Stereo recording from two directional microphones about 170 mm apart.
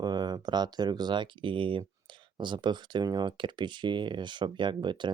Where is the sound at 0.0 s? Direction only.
25° right (ahead or behind).